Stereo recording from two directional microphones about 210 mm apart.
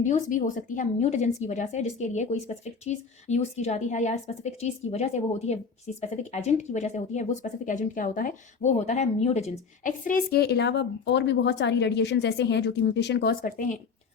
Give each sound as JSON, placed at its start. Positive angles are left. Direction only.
{"t": 0.0, "sound": "a woman's voice", "side_deg": 35}